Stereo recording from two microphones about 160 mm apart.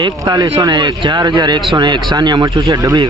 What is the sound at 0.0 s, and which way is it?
Speech, 25° right (ahead or behind).